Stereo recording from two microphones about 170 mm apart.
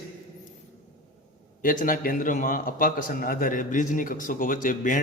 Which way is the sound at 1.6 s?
55° left (ahead or behind).